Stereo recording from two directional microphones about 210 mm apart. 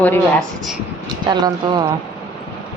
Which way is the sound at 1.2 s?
20° right (ahead or behind).